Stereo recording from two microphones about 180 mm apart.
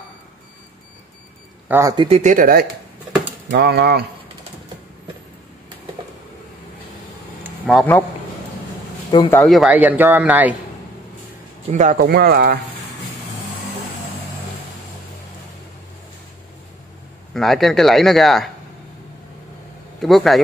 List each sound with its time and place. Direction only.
1.7 s speech: 15° right (ahead or behind)
2.0 s speech: 35° right (ahead or behind)
2.3 s speech: 55° right (ahead or behind)
7.6 s speech: centre (ahead or behind)
9.3 s speech: 5° left (ahead or behind)
11.7 s speech: 40° right (ahead or behind)
12.0 s speech: 60° right (ahead or behind)
17.3 s a man's voice: centre (ahead or behind)
20.0 s a man's voice: centre (ahead or behind)